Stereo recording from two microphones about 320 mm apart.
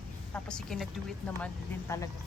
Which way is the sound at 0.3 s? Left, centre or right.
Centre.